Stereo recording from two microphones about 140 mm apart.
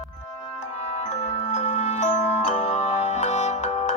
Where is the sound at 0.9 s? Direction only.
55° left (ahead or behind).